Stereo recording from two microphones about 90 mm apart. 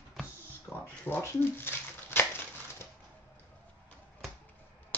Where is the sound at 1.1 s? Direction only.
25° left (ahead or behind).